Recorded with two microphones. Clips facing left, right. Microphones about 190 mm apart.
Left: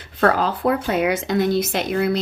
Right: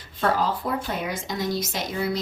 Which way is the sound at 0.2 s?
65° left (ahead or behind).